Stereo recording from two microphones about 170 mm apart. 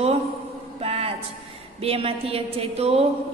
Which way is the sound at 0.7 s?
35° right (ahead or behind).